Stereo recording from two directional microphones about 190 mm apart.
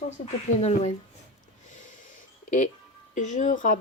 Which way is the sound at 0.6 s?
35° left (ahead or behind).